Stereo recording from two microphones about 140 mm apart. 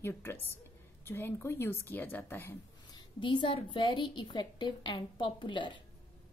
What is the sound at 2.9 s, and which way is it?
A woman's voice, 35° left (ahead or behind).